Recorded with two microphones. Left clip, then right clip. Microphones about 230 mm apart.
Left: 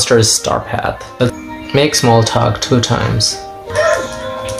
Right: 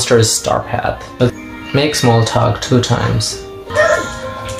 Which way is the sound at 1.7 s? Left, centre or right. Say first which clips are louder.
Left 2 dB; left.